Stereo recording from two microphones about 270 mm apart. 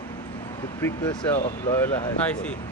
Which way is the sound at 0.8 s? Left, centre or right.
Centre.